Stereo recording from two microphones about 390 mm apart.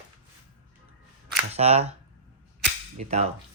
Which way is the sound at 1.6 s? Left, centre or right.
Centre.